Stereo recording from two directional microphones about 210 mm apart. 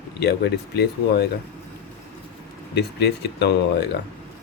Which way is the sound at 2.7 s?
50° left (ahead or behind).